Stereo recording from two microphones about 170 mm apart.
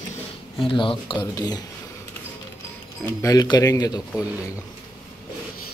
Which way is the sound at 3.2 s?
25° left (ahead or behind).